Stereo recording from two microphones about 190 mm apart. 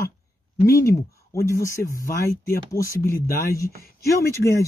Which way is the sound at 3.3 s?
15° left (ahead or behind).